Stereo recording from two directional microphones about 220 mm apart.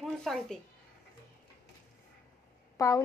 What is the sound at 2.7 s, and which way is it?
Speech, 15° left (ahead or behind).